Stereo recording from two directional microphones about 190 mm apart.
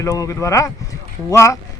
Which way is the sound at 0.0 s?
15° left (ahead or behind).